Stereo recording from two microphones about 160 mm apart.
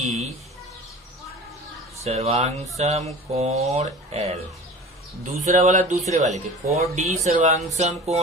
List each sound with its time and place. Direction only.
2.0 s speech: 40° right (ahead or behind)
5.5 s speech: 50° right (ahead or behind)